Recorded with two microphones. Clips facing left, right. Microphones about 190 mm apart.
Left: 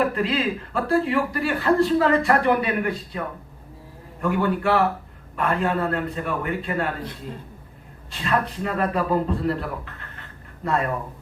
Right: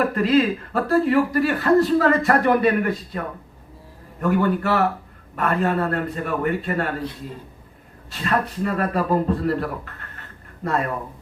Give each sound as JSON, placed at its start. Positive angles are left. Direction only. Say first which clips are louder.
{"t": 0.1, "sound": "a man's voice", "louder": "right 5 dB", "side_deg": -45}
{"t": 4.2, "sound": "a man's voice", "louder": "right 2 dB", "side_deg": -45}
{"t": 8.1, "sound": "speech", "louder": "right 1 dB", "side_deg": -45}